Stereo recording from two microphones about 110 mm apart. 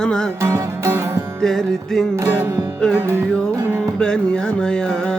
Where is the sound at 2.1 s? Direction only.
25° right (ahead or behind).